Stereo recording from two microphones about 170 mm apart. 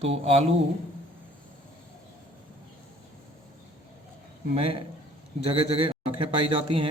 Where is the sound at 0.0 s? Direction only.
35° right (ahead or behind).